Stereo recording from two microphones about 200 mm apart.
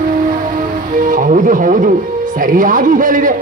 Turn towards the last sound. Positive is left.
turn(degrees=-40)  # may be behind; listen again after turning